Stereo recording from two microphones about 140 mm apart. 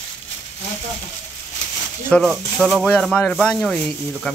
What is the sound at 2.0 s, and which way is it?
Speech, 10° left (ahead or behind).